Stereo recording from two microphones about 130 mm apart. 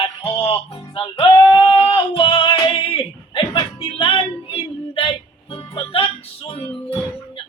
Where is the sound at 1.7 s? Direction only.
45° left (ahead or behind).